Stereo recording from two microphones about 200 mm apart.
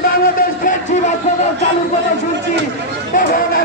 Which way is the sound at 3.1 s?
45° left (ahead or behind).